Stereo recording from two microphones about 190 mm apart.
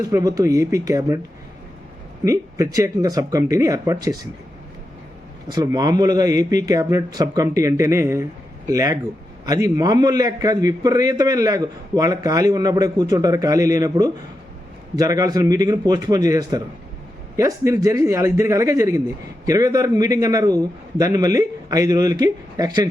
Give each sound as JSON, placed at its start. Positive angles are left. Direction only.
{"t": 0.0, "sound": "speech", "side_deg": -20}
{"t": 2.2, "sound": "speech", "side_deg": -15}
{"t": 5.5, "sound": "a man's voice", "side_deg": -20}